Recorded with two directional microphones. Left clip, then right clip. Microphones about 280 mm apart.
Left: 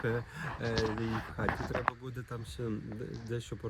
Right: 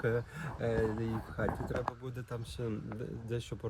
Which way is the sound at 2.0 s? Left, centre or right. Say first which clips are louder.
Even; centre.